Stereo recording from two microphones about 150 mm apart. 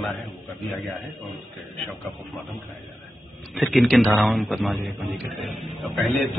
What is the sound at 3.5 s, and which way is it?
A man's voice, centre (ahead or behind).